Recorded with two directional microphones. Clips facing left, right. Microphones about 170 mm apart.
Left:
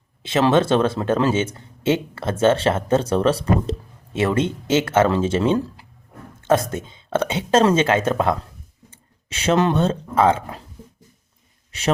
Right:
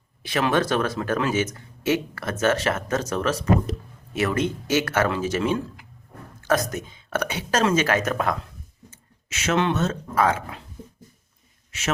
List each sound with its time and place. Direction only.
0.2 s speech: 25° left (ahead or behind)